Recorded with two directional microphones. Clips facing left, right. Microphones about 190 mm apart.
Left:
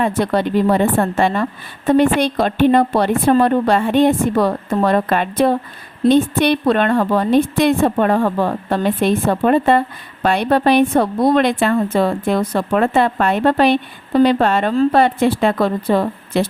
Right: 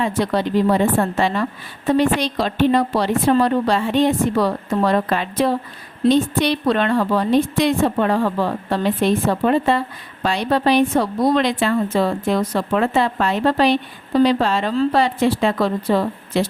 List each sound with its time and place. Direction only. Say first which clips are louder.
0.0 s a woman's voice: left 3 dB; 55° left (ahead or behind)